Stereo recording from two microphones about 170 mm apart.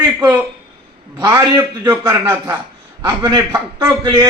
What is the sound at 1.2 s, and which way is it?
A man's voice, 10° right (ahead or behind).